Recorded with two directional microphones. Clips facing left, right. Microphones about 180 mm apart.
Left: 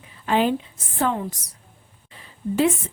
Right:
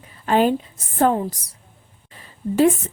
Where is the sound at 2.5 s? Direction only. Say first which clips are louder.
Right 4 dB; 45° right (ahead or behind).